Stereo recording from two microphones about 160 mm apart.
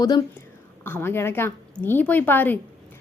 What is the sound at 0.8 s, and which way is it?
A woman's voice, 15° left (ahead or behind).